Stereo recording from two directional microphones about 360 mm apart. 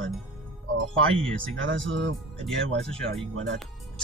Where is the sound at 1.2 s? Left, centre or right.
Centre.